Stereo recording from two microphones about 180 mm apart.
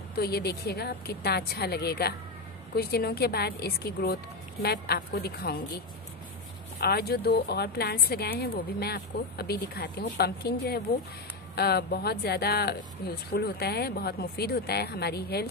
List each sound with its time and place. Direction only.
0.1 s a woman's voice: 60° left (ahead or behind)
6.8 s a woman's voice: 60° left (ahead or behind)